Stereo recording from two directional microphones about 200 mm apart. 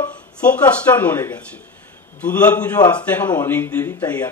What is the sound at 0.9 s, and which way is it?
Speech, 10° left (ahead or behind).